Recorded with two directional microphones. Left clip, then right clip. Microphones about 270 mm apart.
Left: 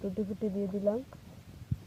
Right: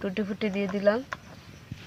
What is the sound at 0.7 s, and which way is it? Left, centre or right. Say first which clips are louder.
Speech: right 8 dB; right.